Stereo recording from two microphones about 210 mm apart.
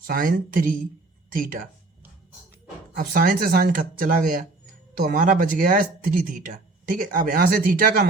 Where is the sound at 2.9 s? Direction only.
45° right (ahead or behind).